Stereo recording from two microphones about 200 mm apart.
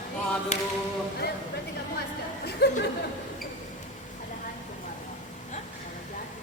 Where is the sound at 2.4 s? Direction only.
55° left (ahead or behind).